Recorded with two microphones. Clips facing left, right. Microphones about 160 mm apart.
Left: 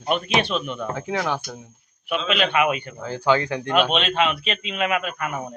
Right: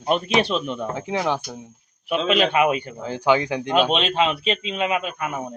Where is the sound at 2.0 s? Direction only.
30° right (ahead or behind).